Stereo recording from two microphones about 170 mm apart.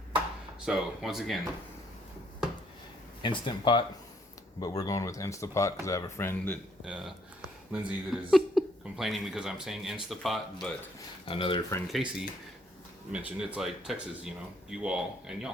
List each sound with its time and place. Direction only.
0.6 s speech: 5° right (ahead or behind)
3.2 s speech: 30° left (ahead or behind); by 6.6 s 10° left (ahead or behind)
6.8 s speech: 5° right (ahead or behind)
11.3 s speech: 30° left (ahead or behind)
11.9 s speech: centre (ahead or behind)